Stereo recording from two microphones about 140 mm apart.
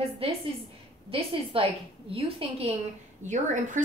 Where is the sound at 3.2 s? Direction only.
60° right (ahead or behind).